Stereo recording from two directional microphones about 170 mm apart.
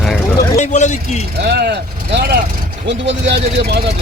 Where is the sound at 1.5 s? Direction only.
75° right (ahead or behind).